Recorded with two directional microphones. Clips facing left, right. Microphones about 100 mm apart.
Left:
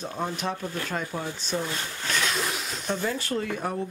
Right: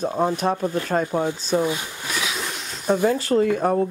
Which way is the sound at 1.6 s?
10° right (ahead or behind).